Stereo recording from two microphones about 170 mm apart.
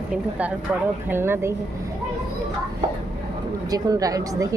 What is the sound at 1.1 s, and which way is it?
Speech, 15° right (ahead or behind).